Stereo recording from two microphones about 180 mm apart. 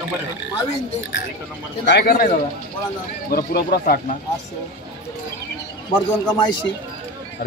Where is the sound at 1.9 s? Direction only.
60° left (ahead or behind).